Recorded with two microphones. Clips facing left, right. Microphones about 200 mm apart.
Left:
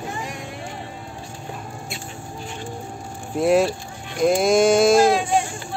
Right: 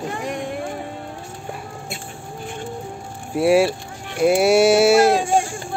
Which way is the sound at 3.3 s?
10° right (ahead or behind).